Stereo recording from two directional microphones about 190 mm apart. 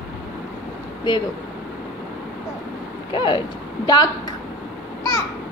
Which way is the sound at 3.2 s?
25° left (ahead or behind).